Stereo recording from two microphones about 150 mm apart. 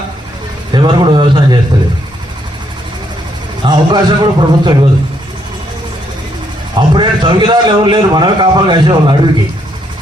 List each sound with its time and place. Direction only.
0.7 s a man's voice: 30° right (ahead or behind)
3.6 s a man's voice: 30° right (ahead or behind)
6.7 s a man's voice: 30° right (ahead or behind)